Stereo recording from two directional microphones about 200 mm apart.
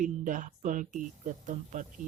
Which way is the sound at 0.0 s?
40° right (ahead or behind).